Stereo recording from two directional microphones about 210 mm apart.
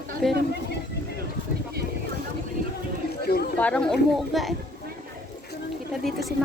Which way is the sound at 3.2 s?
50° left (ahead or behind).